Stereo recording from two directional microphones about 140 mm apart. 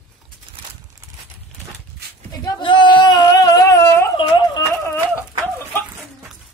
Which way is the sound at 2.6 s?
35° left (ahead or behind).